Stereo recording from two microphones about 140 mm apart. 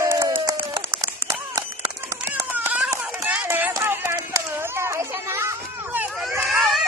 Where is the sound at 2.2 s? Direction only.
15° right (ahead or behind).